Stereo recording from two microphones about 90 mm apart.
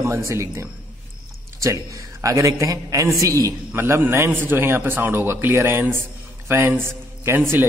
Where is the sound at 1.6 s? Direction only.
35° right (ahead or behind).